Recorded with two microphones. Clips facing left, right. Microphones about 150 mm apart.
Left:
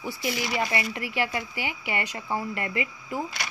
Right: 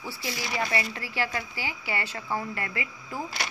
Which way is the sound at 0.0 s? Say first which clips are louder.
Left 5 dB; 15° left (ahead or behind).